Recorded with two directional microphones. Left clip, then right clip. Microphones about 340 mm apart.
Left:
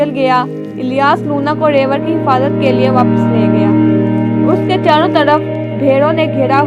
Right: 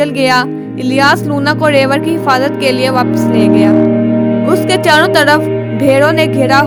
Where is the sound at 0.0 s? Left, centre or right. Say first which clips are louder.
Right 1 dB; right.